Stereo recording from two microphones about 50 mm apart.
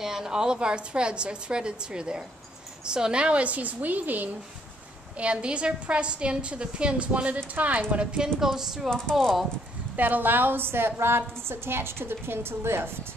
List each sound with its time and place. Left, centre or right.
0.0 s a woman's voice: centre; by 4.4 s right
5.2 s a woman's voice: right
8.4 s a woman's voice: centre
9.9 s a woman's voice: right